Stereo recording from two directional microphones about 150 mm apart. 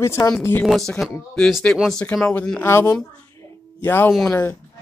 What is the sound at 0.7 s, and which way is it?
Speech, centre (ahead or behind).